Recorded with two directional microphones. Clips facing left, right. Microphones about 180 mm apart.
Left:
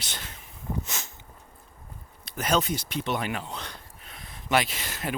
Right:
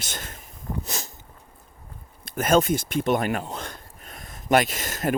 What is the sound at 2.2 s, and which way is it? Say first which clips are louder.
Speech: right 6 dB; 50° right (ahead or behind).